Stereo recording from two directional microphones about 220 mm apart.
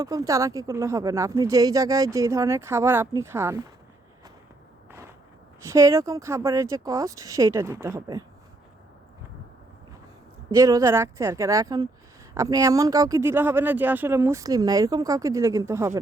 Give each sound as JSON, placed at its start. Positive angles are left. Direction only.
{"t": 0.0, "sound": "speech", "side_deg": -15}
{"t": 4.9, "sound": "a sound", "side_deg": -10}
{"t": 5.6, "sound": "speech", "side_deg": -15}
{"t": 10.5, "sound": "speech", "side_deg": -15}